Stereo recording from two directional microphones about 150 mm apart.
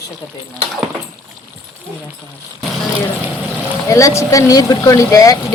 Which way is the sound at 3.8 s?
20° left (ahead or behind).